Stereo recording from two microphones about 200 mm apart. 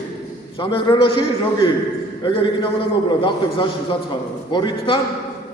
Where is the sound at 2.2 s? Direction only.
25° left (ahead or behind).